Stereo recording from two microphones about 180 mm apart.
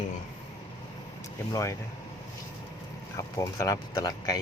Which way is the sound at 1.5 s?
15° left (ahead or behind).